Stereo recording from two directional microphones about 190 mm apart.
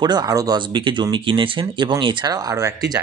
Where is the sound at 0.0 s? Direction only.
20° right (ahead or behind).